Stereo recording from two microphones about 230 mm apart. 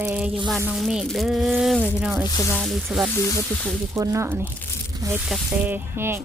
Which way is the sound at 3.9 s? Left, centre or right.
Centre.